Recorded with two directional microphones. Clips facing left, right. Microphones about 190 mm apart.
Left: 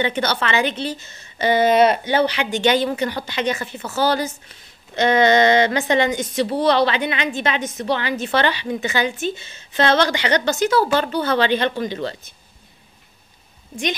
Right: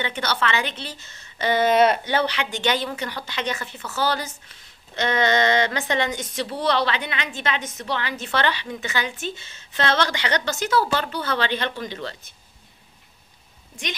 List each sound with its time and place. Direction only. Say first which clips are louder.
0.3 s a woman's voice: left 4 dB; 15° left (ahead or behind)